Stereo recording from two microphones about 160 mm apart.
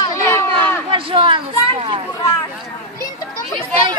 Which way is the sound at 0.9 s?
35° right (ahead or behind).